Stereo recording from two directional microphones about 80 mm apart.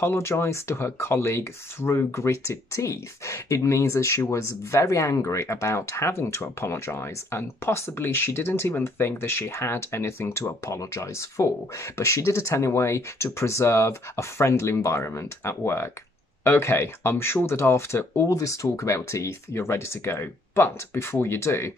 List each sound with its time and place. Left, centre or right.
0.0 s speech: left
18.3 s speech: left